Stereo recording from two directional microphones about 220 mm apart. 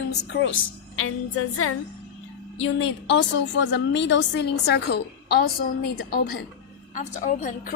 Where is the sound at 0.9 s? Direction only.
70° left (ahead or behind).